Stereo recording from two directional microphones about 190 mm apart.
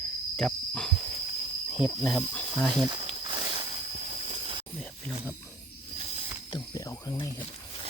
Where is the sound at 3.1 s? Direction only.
25° right (ahead or behind).